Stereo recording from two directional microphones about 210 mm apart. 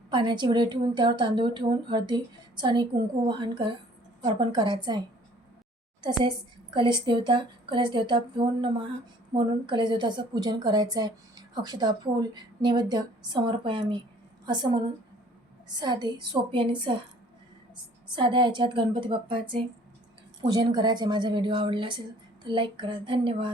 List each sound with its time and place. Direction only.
0.1 s a woman's voice: 20° right (ahead or behind)
6.7 s a woman's voice: 20° right (ahead or behind)
15.7 s a woman's voice: 20° right (ahead or behind)
18.1 s a woman's voice: 20° right (ahead or behind)